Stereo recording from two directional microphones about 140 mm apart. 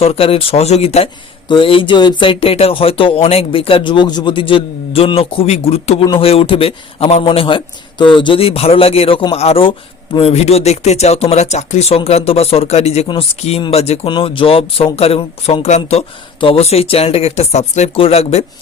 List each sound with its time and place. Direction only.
0.0 s a man's voice: 45° left (ahead or behind)
13.1 s a man's voice: 40° left (ahead or behind)
15.6 s a man's voice: 50° left (ahead or behind)